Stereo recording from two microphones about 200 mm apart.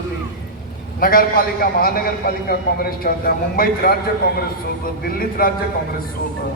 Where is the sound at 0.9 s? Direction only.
45° left (ahead or behind).